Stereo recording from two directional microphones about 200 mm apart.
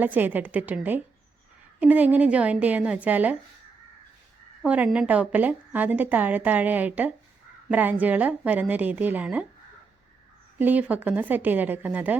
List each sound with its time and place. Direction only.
0.0 s a woman's voice: 10° right (ahead or behind)
4.6 s a woman's voice: 5° right (ahead or behind)
10.6 s a woman's voice: 10° right (ahead or behind)